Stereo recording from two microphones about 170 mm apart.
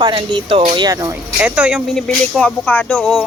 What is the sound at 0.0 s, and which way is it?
Speech, 30° right (ahead or behind).